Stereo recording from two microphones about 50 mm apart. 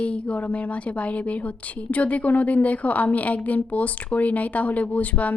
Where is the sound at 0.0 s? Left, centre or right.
Left.